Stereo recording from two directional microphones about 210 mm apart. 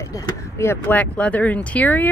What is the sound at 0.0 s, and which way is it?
A woman's voice, 15° left (ahead or behind).